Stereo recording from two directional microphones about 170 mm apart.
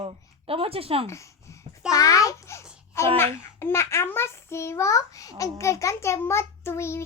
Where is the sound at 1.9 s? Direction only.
20° left (ahead or behind).